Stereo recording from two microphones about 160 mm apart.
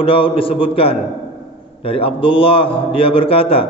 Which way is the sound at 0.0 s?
35° left (ahead or behind).